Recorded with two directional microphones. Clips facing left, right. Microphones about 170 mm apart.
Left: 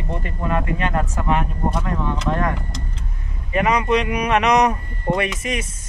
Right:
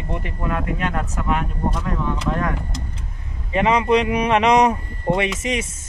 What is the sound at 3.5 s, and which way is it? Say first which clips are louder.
Speech: right 1 dB; 25° right (ahead or behind).